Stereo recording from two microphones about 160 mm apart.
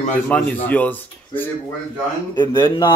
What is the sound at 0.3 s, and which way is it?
Speech, 10° left (ahead or behind).